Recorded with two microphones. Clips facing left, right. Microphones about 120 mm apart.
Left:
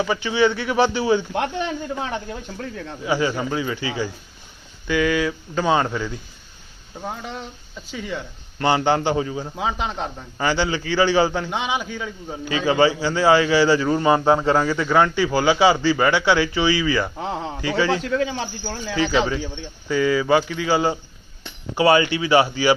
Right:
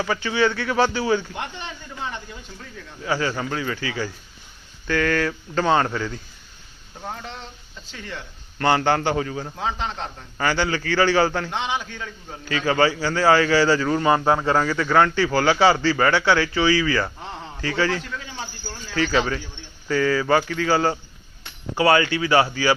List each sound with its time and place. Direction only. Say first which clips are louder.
0.0 s speech: left 2 dB; 15° left (ahead or behind)
1.3 s speech: left 9 dB; 65° left (ahead or behind)
3.0 s a man's voice: left 2 dB; 15° left (ahead or behind)
4.9 s a man's voice: left 2 dB; 10° left (ahead or behind)
17.2 s a man's voice: left 8 dB; 90° left
17.6 s speech: left 2 dB; 20° left (ahead or behind)
18.0 s speech: left 11 dB; 75° left (ahead or behind)
18.9 s a man's voice: left 1 dB; 20° left (ahead or behind)